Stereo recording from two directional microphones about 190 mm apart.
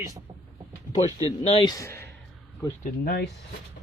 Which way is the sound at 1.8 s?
15° left (ahead or behind).